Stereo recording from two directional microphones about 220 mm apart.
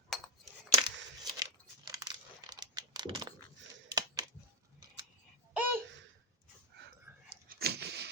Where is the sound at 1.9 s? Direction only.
15° right (ahead or behind).